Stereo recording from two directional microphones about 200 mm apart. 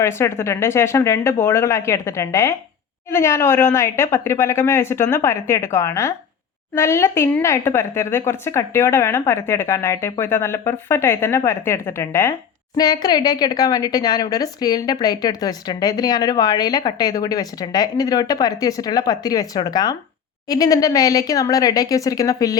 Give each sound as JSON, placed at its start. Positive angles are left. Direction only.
{"t": 0.0, "sound": "a woman's voice", "side_deg": 15}